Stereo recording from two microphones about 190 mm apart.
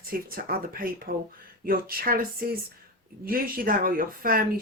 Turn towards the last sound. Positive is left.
turn(degrees=-50)  # may be behind; listen again after turning